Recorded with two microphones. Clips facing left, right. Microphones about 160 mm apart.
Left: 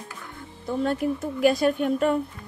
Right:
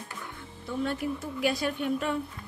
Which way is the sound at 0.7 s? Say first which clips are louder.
Left 6 dB; 45° left (ahead or behind).